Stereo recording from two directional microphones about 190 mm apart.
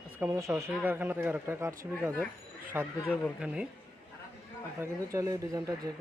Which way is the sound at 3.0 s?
Centre (ahead or behind).